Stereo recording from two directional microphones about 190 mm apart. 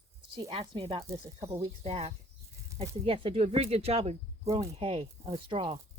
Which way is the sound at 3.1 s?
30° right (ahead or behind).